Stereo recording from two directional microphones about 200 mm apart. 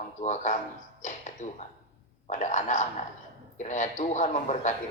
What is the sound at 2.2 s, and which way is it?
A man's voice, 40° left (ahead or behind).